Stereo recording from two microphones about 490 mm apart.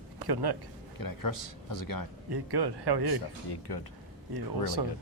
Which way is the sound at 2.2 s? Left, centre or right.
Right.